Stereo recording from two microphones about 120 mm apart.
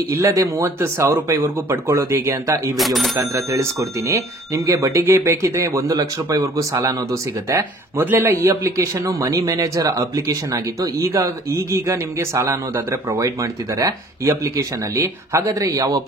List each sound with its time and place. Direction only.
0.1 s speech: 25° right (ahead or behind)
2.8 s speech: centre (ahead or behind)
3.2 s speech: 25° right (ahead or behind)